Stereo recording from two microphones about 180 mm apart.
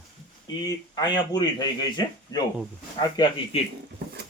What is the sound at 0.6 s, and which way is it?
A man's voice, 20° left (ahead or behind).